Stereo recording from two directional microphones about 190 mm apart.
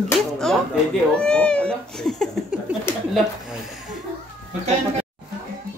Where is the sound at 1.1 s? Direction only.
5° left (ahead or behind).